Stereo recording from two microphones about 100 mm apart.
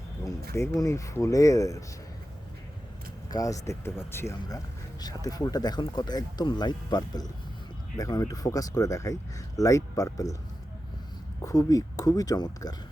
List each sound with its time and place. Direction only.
0.3 s speech: 30° left (ahead or behind)
3.2 s speech: 35° left (ahead or behind)
4.4 s speech: 40° left (ahead or behind)
11.4 s speech: 35° left (ahead or behind)